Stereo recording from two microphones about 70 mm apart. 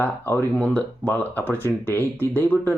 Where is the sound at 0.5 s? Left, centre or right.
Left.